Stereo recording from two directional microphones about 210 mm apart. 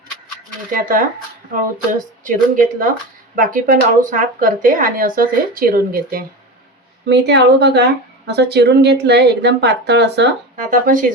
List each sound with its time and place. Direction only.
0.8 s speech: 40° right (ahead or behind)
2.2 s speech: 40° right (ahead or behind); by 10.2 s 55° right (ahead or behind)
10.7 s speech: 40° right (ahead or behind)